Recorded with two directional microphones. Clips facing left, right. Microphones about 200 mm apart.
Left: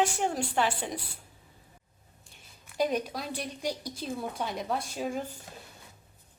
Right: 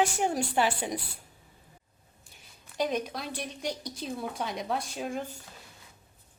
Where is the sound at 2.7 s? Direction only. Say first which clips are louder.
Left 1 dB; 5° left (ahead or behind).